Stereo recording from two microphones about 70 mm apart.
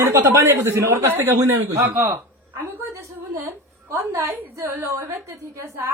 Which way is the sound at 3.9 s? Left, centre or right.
Right.